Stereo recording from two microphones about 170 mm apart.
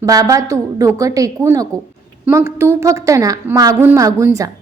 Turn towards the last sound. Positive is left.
turn(degrees=-20)  # may be behind; listen again after turning